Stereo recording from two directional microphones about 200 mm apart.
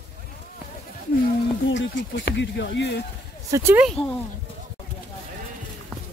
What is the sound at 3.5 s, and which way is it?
Speech, 10° right (ahead or behind).